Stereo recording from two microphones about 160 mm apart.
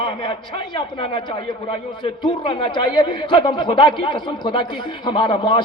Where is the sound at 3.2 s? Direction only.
30° left (ahead or behind).